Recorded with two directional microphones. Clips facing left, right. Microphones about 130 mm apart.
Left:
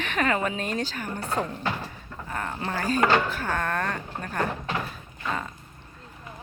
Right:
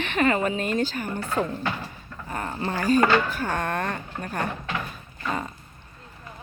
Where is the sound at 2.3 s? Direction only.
10° right (ahead or behind).